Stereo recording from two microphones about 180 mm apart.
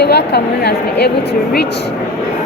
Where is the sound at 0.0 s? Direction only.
65° left (ahead or behind).